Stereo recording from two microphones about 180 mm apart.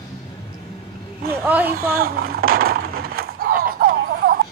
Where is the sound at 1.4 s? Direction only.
10° right (ahead or behind).